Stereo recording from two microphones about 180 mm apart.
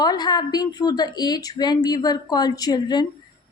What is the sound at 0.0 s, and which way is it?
A woman's voice, 20° left (ahead or behind).